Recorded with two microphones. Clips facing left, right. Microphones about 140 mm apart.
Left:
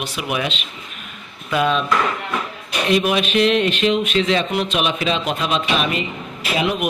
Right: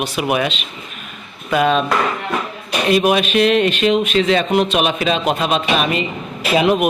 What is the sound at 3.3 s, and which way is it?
A man's voice, 60° right (ahead or behind).